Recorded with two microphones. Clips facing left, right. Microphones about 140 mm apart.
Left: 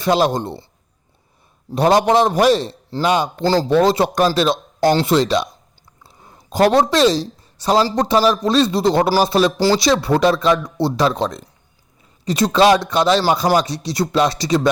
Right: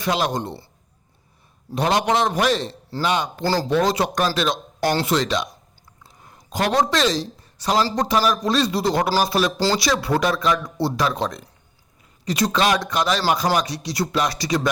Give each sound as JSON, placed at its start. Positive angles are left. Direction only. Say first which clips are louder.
{"t": 0.0, "sound": "a man's voice", "louder": "left 6 dB", "side_deg": 30}
{"t": 1.7, "sound": "a man's voice", "louder": "left 6 dB", "side_deg": 35}
{"t": 3.4, "sound": "speech", "louder": "left 5 dB", "side_deg": 20}
{"t": 3.7, "sound": "a man's voice", "louder": "left 5 dB", "side_deg": 30}
{"t": 4.9, "sound": "speech", "louder": "left 6 dB", "side_deg": 20}
{"t": 5.1, "sound": "a man's voice", "louder": "left 5 dB", "side_deg": 30}
{"t": 6.5, "sound": "a man's voice", "louder": "left 6 dB", "side_deg": 30}
{"t": 9.6, "sound": "speech", "louder": "left 5 dB", "side_deg": 15}
{"t": 10.0, "sound": "a man's voice", "louder": "left 5 dB", "side_deg": 25}